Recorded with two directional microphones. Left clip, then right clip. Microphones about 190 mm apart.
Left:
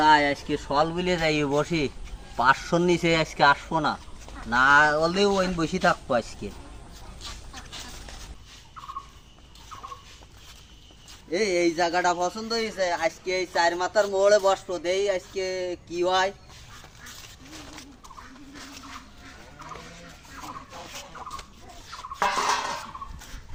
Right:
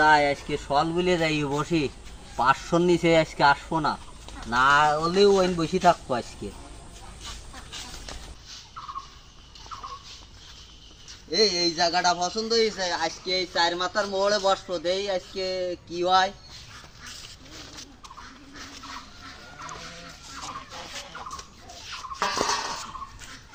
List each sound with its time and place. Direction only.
0.1 s a man's voice: centre (ahead or behind)
11.3 s a man's voice: 5° left (ahead or behind)
22.2 s a sound: 20° left (ahead or behind)